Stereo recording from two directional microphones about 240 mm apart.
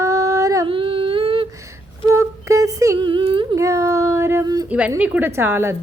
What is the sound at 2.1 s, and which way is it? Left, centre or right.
Humming, centre.